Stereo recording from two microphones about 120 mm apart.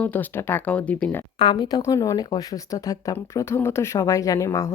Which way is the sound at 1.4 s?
40° left (ahead or behind).